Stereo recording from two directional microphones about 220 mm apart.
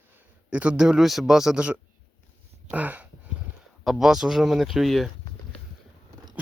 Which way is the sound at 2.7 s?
5° right (ahead or behind).